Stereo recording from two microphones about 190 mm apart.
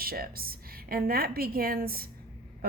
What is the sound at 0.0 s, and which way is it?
A woman's voice, 50° right (ahead or behind).